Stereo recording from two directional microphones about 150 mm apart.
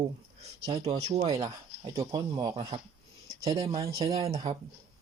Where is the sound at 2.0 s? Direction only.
25° right (ahead or behind).